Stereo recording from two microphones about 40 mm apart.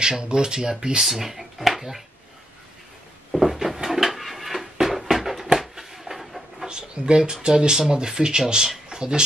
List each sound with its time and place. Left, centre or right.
0.0 s speech: centre
1.0 s speech: centre
3.3 s drawer open or close: centre
4.7 s a sound: centre
6.7 s a sound: right
7.4 s speech: centre